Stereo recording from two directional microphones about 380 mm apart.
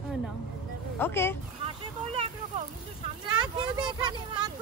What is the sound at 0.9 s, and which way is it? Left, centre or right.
Speech, centre.